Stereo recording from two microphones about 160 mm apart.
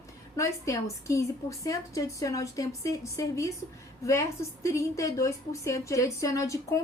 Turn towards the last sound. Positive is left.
turn(degrees=20)  # may be behind; listen again after turning